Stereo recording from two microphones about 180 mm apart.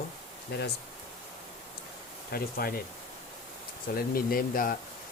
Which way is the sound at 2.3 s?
55° left (ahead or behind).